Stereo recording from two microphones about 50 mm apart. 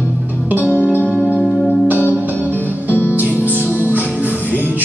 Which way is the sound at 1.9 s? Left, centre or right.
Right.